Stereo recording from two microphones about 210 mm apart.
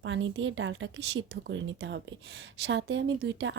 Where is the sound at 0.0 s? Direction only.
65° right (ahead or behind).